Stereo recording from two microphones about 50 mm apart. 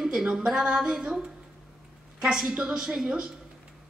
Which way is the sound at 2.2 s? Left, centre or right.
Centre.